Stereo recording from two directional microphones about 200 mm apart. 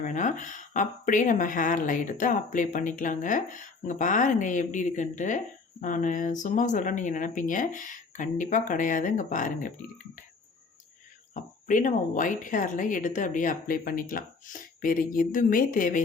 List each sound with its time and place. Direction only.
0.0 s speech: 40° left (ahead or behind)
11.3 s speech: 40° left (ahead or behind)